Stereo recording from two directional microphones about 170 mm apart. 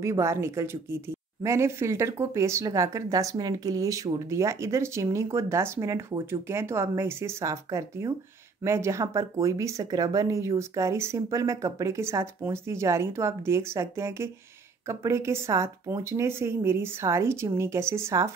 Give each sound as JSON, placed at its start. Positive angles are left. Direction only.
{"t": 0.0, "sound": "speech", "side_deg": -15}